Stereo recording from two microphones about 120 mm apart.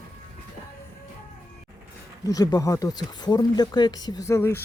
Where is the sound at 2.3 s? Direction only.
30° left (ahead or behind).